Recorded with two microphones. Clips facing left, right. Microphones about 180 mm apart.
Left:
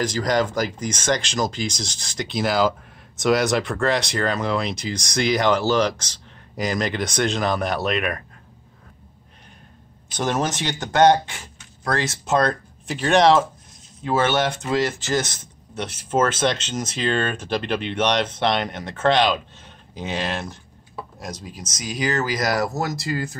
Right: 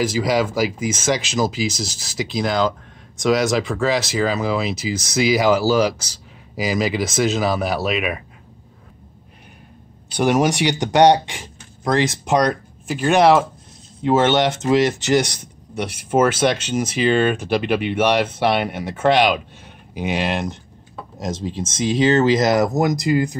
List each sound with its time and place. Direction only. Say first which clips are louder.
0.0 s speech: right 2 dB; 5° right (ahead or behind)
10.1 s speech: right 6 dB; 10° right (ahead or behind)
12.8 s speech: right 2 dB; 5° right (ahead or behind)
14.0 s speech: right 5 dB; 20° right (ahead or behind)